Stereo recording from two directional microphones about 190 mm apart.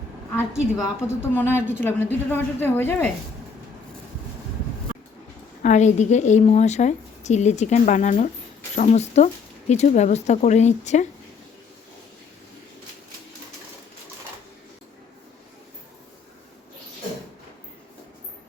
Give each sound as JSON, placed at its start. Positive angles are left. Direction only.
{"t": 0.8, "sound": "a woman's voice", "side_deg": 15}
{"t": 5.6, "sound": "a woman's voice", "side_deg": 40}